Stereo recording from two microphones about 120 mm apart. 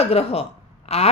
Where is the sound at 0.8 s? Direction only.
60° left (ahead or behind).